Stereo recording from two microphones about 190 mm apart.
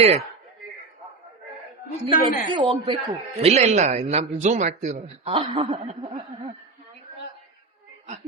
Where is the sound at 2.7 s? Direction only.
30° right (ahead or behind).